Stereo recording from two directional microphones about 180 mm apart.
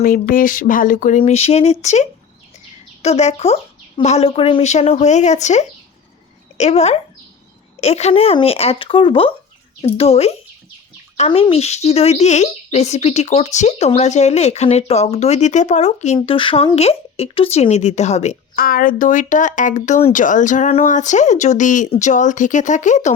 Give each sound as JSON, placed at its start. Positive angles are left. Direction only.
{"t": 0.0, "sound": "speech", "side_deg": 50}
{"t": 1.2, "sound": "speech", "side_deg": 35}
{"t": 18.5, "sound": "speech", "side_deg": 55}